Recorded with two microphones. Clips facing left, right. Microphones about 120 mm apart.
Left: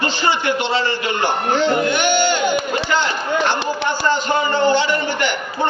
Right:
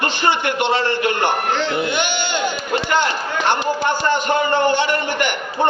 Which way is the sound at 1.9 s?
20° right (ahead or behind).